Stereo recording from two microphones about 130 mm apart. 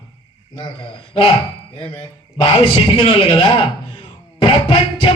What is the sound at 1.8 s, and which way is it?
Music, 45° left (ahead or behind).